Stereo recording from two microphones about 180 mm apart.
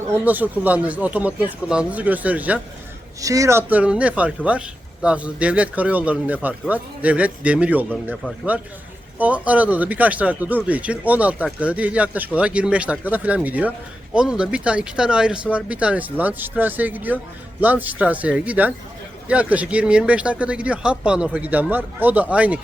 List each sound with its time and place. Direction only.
0.1 s speech: 10° right (ahead or behind)
3.2 s speech: 20° right (ahead or behind)
3.7 s speech: 10° right (ahead or behind)